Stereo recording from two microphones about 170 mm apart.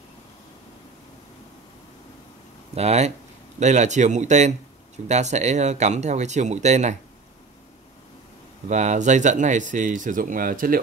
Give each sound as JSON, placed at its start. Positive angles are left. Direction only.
{"t": 2.7, "sound": "speech", "side_deg": -40}
{"t": 8.6, "sound": "speech", "side_deg": -45}